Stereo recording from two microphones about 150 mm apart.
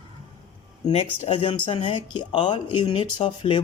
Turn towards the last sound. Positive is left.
turn(degrees=35)  # may be behind; listen again after turning